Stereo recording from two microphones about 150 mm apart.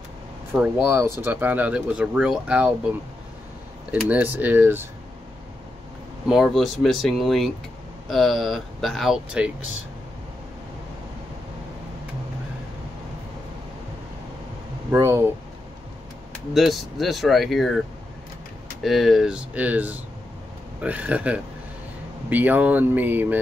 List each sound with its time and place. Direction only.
0.5 s speech: 10° right (ahead or behind)
3.9 s speech: 10° right (ahead or behind)
6.2 s speech: centre (ahead or behind)
14.9 s speech: 15° right (ahead or behind)
16.5 s speech: centre (ahead or behind)
18.8 s speech: centre (ahead or behind)